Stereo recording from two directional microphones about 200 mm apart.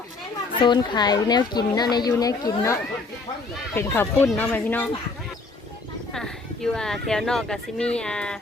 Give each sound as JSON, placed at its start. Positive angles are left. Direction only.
{"t": 0.6, "sound": "a woman's voice", "side_deg": 20}
{"t": 3.8, "sound": "speech", "side_deg": 10}
{"t": 6.1, "sound": "speech", "side_deg": 5}